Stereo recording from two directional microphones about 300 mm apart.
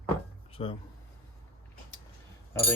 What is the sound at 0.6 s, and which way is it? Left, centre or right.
Speech, centre.